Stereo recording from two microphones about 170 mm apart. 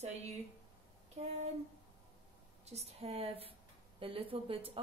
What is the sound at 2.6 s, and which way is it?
Speech, 40° right (ahead or behind).